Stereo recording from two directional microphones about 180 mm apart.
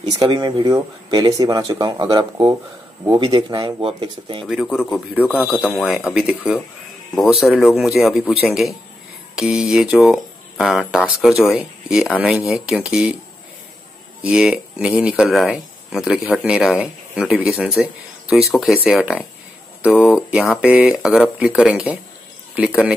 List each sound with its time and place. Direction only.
0.0 s speech: 25° right (ahead or behind)
4.5 s speech: centre (ahead or behind)
5.2 s speech: 10° left (ahead or behind)
5.8 s speech: centre (ahead or behind)
14.2 s speech: 5° right (ahead or behind)